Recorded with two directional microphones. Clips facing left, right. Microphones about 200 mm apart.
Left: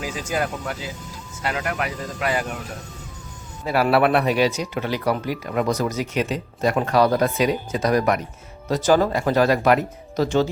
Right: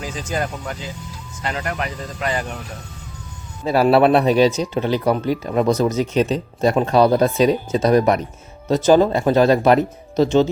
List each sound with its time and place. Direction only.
0.0 s speech: 10° left (ahead or behind)
3.6 s speech: 25° right (ahead or behind)